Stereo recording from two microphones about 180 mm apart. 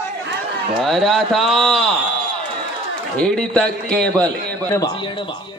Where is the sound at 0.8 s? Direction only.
Centre (ahead or behind).